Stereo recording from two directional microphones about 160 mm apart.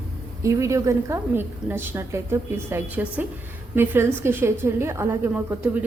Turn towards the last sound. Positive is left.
turn(degrees=-15)  # may be behind; listen again after turning